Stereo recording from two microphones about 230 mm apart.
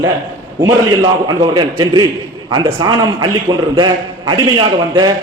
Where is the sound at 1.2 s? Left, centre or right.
Centre.